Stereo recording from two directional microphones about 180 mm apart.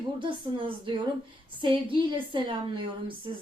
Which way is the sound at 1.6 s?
30° right (ahead or behind).